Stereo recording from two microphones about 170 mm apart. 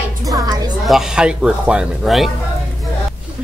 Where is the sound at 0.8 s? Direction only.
Centre (ahead or behind).